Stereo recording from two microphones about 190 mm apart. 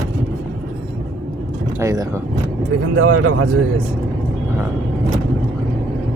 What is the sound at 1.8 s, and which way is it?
Speech, 15° right (ahead or behind).